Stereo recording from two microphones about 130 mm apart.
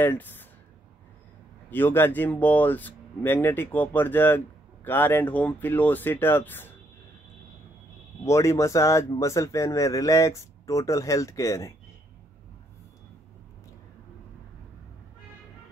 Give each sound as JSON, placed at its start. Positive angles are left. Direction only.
{"t": 0.0, "sound": "speech", "side_deg": 15}
{"t": 1.7, "sound": "speech", "side_deg": 15}
{"t": 8.3, "sound": "speech", "side_deg": 25}